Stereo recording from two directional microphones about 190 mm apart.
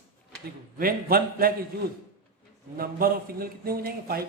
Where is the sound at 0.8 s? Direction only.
50° right (ahead or behind).